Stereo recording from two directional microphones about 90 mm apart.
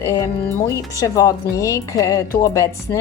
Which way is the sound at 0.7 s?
35° left (ahead or behind).